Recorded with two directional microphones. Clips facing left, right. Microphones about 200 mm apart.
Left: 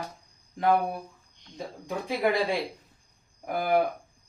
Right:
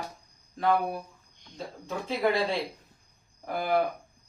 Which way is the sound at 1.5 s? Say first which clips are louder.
Left 2 dB; 15° left (ahead or behind).